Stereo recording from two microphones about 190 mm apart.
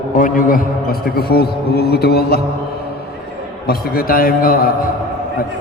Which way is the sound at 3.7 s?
50° left (ahead or behind).